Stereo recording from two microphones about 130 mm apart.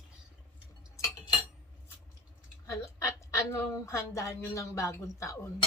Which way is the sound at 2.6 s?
20° left (ahead or behind).